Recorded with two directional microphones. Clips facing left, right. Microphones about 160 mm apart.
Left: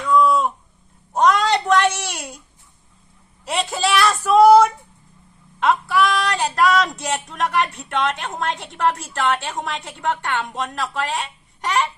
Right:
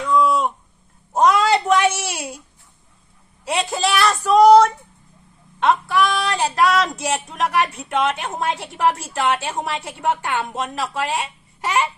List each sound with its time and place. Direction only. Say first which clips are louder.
0.1 s a sound: left 1 dB; centre (ahead or behind)
3.4 s speech: right 1 dB; centre (ahead or behind)
4.3 s female singing: even; 5° left (ahead or behind)
5.5 s speech: even; centre (ahead or behind)